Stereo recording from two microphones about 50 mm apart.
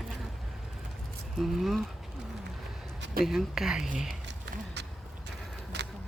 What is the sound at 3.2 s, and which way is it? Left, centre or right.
Speech, centre.